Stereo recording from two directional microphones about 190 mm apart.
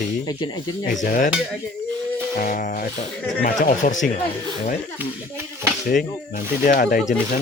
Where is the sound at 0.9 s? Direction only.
45° left (ahead or behind).